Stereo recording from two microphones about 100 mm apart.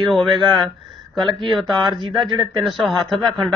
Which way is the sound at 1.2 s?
55° right (ahead or behind).